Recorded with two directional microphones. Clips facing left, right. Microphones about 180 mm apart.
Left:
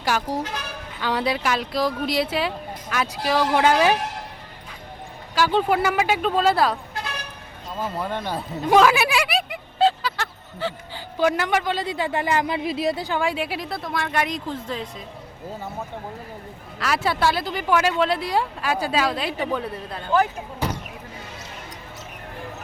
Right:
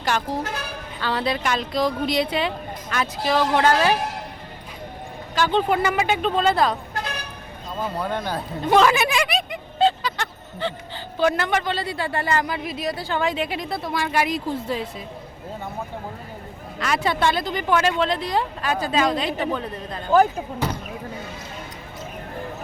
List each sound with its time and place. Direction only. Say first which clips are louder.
0.0 s a woman's voice: even; 10° left (ahead or behind)
5.3 s a woman's voice: even; 10° left (ahead or behind)
7.8 s a woman's voice: right 1 dB; centre (ahead or behind)
12.5 s speech: left 4 dB; 25° left (ahead or behind)
13.1 s a woman's voice: right 1 dB; 10° left (ahead or behind); by 15.0 s 10° right (ahead or behind)
16.8 s a woman's voice: even; 5° left (ahead or behind)